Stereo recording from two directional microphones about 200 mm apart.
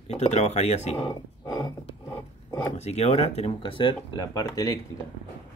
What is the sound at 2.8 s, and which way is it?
Speech, 30° left (ahead or behind).